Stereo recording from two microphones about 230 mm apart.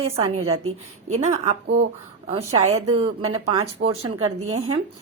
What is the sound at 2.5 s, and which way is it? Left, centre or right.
A woman's voice, right.